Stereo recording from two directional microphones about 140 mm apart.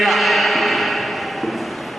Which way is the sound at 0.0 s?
Centre (ahead or behind).